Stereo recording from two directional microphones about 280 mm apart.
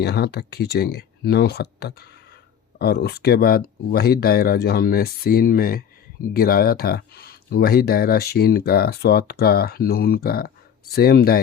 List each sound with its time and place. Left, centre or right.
0.0 s speech: left